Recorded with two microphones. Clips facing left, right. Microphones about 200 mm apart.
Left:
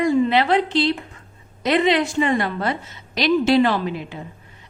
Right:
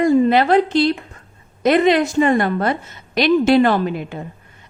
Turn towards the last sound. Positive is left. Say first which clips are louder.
# right 4 dB
turn(degrees=-50)  # may be behind; listen again after turning